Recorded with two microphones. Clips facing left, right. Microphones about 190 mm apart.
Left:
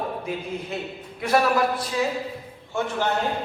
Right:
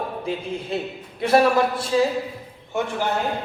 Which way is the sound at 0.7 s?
30° right (ahead or behind).